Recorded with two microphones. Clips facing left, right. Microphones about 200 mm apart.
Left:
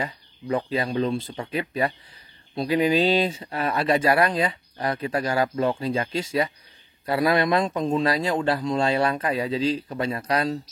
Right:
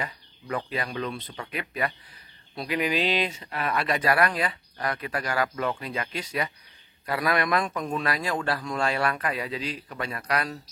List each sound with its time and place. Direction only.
0.0 s speech: 25° left (ahead or behind)